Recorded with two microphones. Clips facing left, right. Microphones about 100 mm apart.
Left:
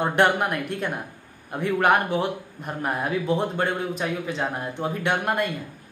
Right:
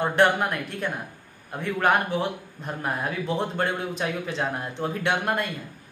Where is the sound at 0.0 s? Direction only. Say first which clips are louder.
Even; 15° left (ahead or behind).